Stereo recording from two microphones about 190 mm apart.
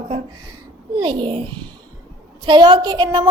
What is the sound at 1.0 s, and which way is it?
Speech, 25° right (ahead or behind).